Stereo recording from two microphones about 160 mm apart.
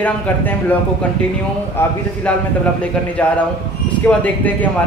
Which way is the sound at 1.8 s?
15° left (ahead or behind).